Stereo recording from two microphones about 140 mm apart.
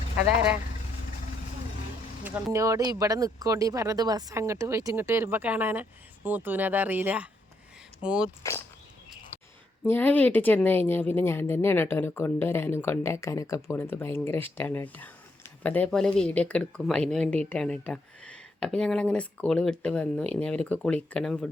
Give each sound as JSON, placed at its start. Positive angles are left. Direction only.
{"t": 0.3, "sound": "speech", "side_deg": -10}
{"t": 2.2, "sound": "speech", "side_deg": -15}
{"t": 9.8, "sound": "speech", "side_deg": 15}